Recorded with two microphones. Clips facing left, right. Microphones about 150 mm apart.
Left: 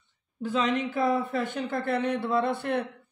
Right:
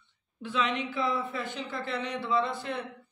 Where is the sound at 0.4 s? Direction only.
40° left (ahead or behind).